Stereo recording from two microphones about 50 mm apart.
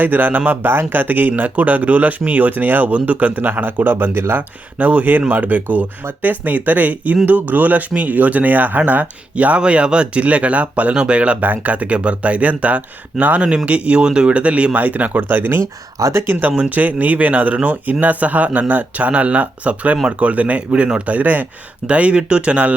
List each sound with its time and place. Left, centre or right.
0.0 s speech: right
4.1 s speech: right
4.4 s speech: right
16.5 s speech: right